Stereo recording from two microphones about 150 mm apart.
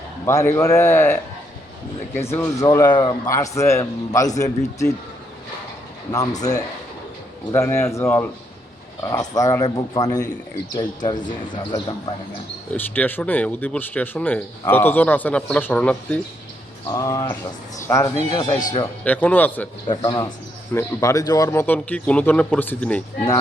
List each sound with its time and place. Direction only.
0.3 s a man's voice: 15° left (ahead or behind)
6.1 s a man's voice: 25° left (ahead or behind)
12.7 s speech: 10° left (ahead or behind)
16.9 s a man's voice: 20° left (ahead or behind)
19.0 s speech: 10° left (ahead or behind)
20.0 s a man's voice: 30° left (ahead or behind); by 23.0 s 10° left (ahead or behind)